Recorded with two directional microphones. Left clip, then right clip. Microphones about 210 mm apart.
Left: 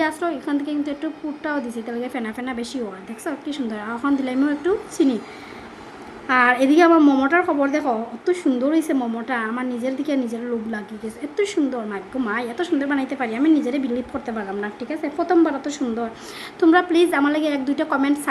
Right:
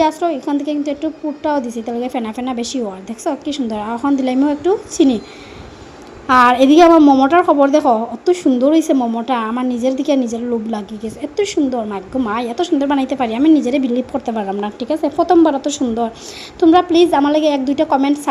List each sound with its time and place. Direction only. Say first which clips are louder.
0.0 s a woman's voice: right 7 dB; 15° right (ahead or behind)
6.2 s a woman's voice: right 7 dB; 20° right (ahead or behind)